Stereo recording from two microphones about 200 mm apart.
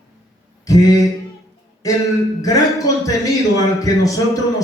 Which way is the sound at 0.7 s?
15° left (ahead or behind).